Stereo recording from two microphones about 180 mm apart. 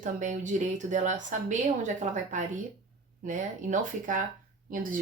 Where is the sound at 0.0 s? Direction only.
45° right (ahead or behind).